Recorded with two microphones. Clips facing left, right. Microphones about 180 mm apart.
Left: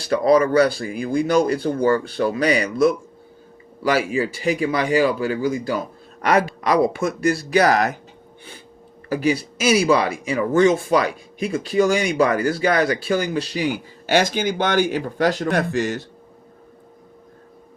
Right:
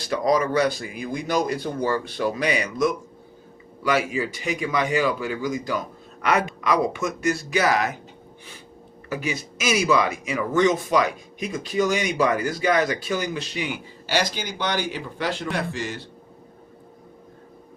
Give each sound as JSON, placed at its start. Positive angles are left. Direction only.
{"t": 0.1, "sound": "speech", "side_deg": 60}
{"t": 0.5, "sound": "speech", "side_deg": 30}
{"t": 1.6, "sound": "speech", "side_deg": 55}
{"t": 2.4, "sound": "speech", "side_deg": 35}
{"t": 9.0, "sound": "speech", "side_deg": 35}
{"t": 14.1, "sound": "speech", "side_deg": 50}